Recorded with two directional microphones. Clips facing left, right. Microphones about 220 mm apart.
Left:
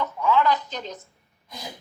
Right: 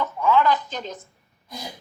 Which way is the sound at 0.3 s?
50° right (ahead or behind).